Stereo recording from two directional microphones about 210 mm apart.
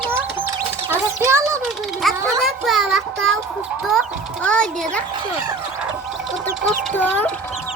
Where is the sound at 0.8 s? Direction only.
15° right (ahead or behind).